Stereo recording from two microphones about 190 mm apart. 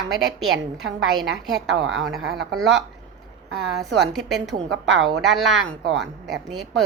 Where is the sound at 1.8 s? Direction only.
Centre (ahead or behind).